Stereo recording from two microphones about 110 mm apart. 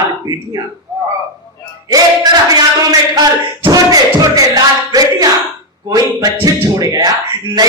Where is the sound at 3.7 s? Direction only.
35° right (ahead or behind).